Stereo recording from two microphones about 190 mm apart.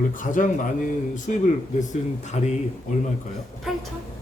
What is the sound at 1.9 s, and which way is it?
Speech, 35° left (ahead or behind).